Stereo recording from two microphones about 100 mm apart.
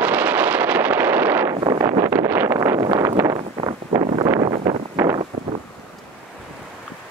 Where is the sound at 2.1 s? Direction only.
20° right (ahead or behind).